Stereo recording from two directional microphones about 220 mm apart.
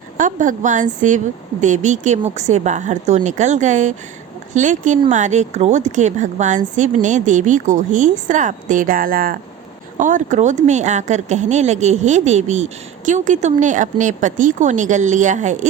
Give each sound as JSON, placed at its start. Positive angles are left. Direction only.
{"t": 0.2, "sound": "speech", "side_deg": -35}